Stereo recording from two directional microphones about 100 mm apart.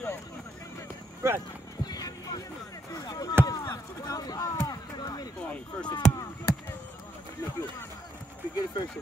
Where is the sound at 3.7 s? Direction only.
35° left (ahead or behind).